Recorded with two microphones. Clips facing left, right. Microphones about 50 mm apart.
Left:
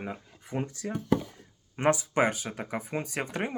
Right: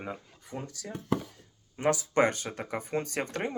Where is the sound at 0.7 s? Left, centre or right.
Left.